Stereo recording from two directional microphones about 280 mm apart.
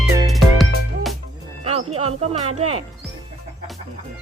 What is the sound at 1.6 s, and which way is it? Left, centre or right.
Music, right.